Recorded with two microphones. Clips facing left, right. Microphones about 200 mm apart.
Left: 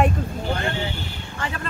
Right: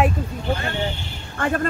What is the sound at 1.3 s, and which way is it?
Speech, 50° right (ahead or behind).